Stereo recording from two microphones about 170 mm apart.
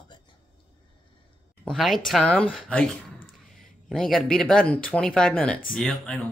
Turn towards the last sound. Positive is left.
turn(degrees=0)  # may be behind; listen again after turning